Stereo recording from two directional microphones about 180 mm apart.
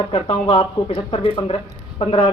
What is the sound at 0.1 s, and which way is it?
Speech, 30° left (ahead or behind).